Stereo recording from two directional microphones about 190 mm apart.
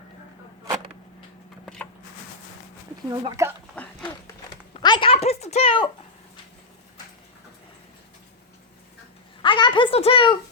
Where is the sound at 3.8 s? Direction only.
5° left (ahead or behind).